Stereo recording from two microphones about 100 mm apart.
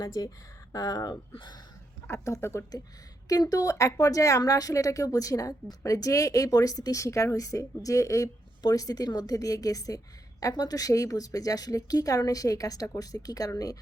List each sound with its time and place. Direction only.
0.0 s speech: 40° left (ahead or behind)
2.0 s speech: 30° left (ahead or behind)
3.2 s speech: 40° left (ahead or behind)